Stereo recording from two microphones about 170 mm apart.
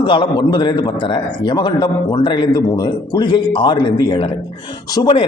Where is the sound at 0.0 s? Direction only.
30° left (ahead or behind).